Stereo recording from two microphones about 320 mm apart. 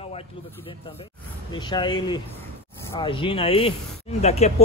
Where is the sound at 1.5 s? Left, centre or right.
Centre.